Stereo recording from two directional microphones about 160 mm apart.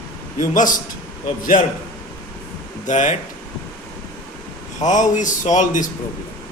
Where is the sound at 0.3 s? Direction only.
55° left (ahead or behind).